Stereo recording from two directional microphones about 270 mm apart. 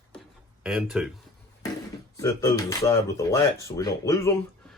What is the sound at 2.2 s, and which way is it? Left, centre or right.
Speech, centre.